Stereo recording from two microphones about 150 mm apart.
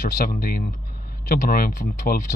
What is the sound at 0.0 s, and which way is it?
Speech, 70° left (ahead or behind).